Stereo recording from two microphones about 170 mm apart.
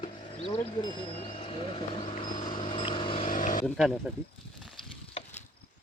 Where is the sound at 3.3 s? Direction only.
50° left (ahead or behind).